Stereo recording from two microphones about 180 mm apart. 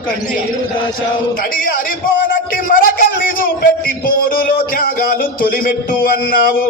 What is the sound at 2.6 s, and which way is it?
A man's voice, 50° left (ahead or behind).